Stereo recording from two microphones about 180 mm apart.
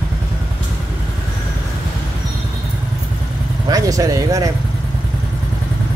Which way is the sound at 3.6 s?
20° right (ahead or behind).